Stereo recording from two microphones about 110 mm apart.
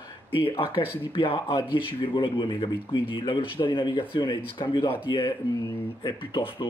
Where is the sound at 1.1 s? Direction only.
55° left (ahead or behind).